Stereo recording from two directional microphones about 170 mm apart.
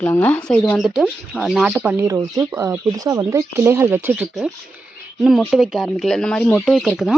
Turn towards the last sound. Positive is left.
turn(degrees=0)  # may be behind; listen again after turning